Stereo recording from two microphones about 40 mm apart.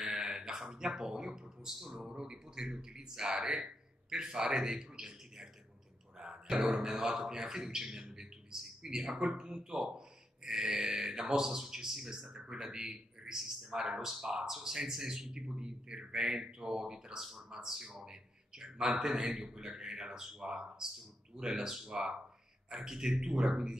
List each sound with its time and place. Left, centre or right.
0.0 s a sound: centre
1.7 s speech: centre
13.4 s speech: centre